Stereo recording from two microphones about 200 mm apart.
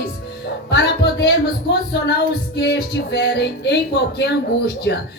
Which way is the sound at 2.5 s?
55° left (ahead or behind).